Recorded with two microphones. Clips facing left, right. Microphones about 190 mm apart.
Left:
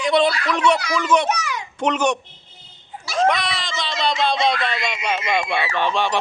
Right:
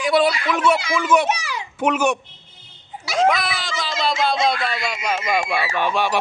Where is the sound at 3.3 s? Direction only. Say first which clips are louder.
Right 1 dB; centre (ahead or behind).